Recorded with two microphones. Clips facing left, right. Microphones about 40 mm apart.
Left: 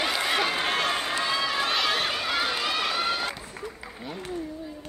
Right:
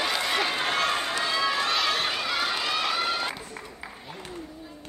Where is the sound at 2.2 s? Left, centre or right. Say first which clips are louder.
Left 1 dB; centre.